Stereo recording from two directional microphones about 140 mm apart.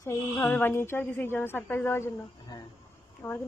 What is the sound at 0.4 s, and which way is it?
A woman's voice, 15° left (ahead or behind).